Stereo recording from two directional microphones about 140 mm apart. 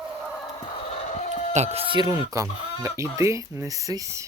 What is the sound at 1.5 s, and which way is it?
Speech, 50° right (ahead or behind).